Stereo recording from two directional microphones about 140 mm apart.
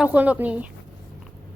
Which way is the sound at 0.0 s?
10° right (ahead or behind).